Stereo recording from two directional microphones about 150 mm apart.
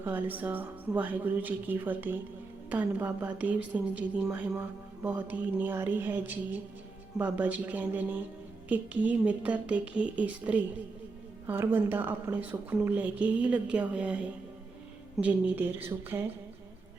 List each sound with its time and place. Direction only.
0.0 s a woman's voice: 10° right (ahead or behind)
15.2 s a woman's voice: 10° right (ahead or behind)